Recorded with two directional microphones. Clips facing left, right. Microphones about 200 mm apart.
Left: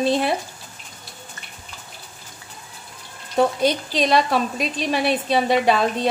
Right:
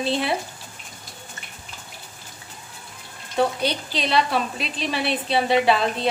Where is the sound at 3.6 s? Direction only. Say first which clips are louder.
Left 5 dB; 45° left (ahead or behind).